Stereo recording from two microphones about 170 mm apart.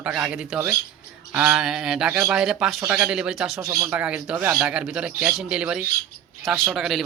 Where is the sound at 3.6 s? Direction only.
20° right (ahead or behind).